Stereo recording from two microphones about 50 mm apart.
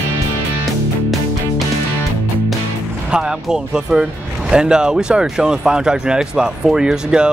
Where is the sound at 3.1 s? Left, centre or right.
Centre.